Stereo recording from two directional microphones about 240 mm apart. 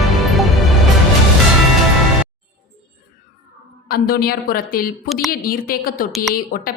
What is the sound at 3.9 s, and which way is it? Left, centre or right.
A woman's voice, left.